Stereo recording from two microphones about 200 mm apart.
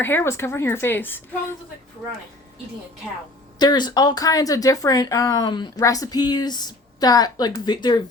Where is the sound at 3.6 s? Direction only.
20° left (ahead or behind).